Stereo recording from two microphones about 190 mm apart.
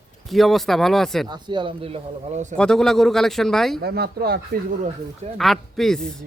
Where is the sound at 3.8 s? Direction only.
55° right (ahead or behind).